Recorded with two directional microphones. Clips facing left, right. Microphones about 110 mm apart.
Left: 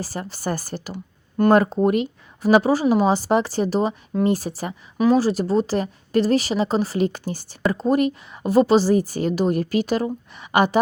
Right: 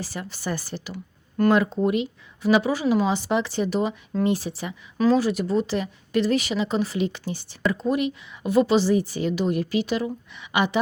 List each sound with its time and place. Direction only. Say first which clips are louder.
0.0 s speech: left 4 dB; 40° left (ahead or behind)